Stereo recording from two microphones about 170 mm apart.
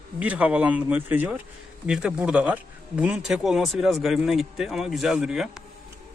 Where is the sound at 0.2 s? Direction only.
10° right (ahead or behind).